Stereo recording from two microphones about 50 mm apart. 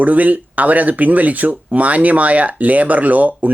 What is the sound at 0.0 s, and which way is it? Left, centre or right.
Speech, right.